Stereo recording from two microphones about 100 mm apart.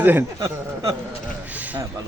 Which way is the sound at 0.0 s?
20° right (ahead or behind).